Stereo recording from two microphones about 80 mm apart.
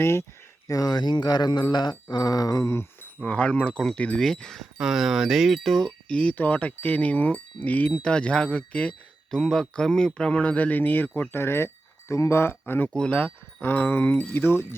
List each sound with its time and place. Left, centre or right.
0.0 s speech: left
0.7 s a sound: left
3.2 s speech: centre
4.8 s speech: centre
6.1 s speech: centre
12.9 s speech: centre
13.6 s speech: left